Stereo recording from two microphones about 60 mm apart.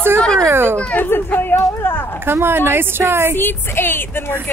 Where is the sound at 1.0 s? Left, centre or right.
Left.